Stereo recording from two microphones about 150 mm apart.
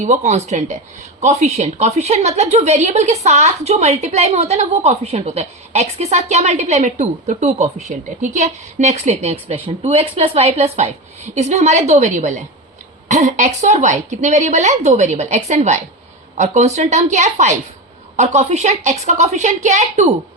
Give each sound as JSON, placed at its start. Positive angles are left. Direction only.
{"t": 0.0, "sound": "a woman's voice", "side_deg": -50}